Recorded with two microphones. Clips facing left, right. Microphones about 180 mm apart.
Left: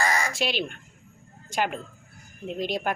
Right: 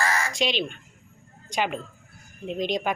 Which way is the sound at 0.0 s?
15° left (ahead or behind).